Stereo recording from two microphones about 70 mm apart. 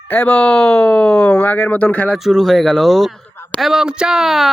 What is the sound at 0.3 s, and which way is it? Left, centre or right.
Speech, centre.